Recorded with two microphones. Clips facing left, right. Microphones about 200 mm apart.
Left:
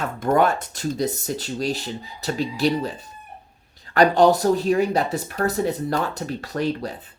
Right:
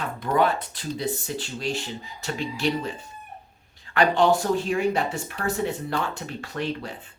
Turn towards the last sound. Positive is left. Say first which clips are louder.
# left 5 dB
turn(degrees=40)  # may be behind; listen again after turning